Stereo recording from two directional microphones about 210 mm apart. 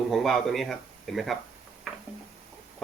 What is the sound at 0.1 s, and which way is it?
Speech, centre (ahead or behind).